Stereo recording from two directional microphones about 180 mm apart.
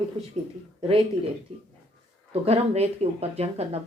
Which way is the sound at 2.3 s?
35° right (ahead or behind).